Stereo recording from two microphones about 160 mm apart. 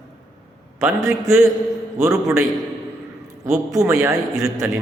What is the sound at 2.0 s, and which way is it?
Speech, 15° right (ahead or behind).